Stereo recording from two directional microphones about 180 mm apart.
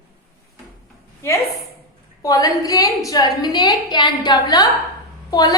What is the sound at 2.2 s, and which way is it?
A woman's voice, 20° left (ahead or behind).